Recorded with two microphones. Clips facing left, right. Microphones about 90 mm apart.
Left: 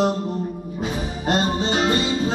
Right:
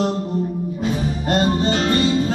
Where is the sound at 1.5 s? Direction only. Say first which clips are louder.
Right 2 dB; 20° left (ahead or behind).